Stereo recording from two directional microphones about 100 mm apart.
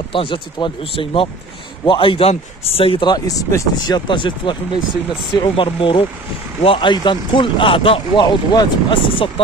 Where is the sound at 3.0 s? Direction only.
45° left (ahead or behind).